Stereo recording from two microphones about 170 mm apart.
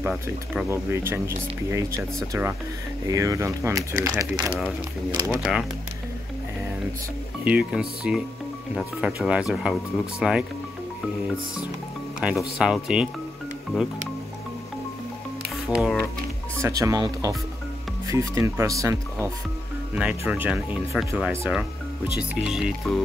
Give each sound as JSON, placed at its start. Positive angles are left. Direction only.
{"t": 0.0, "sound": "speech", "side_deg": -5}
{"t": 0.7, "sound": "speech", "side_deg": -15}
{"t": 5.4, "sound": "speech", "side_deg": -5}
{"t": 7.4, "sound": "speech", "side_deg": -10}
{"t": 12.2, "sound": "speech", "side_deg": -5}
{"t": 15.7, "sound": "speech", "side_deg": -5}
{"t": 16.6, "sound": "speech", "side_deg": -20}